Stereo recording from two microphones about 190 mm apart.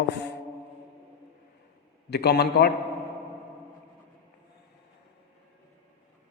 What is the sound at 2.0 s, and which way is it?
Mantra, 60° left (ahead or behind).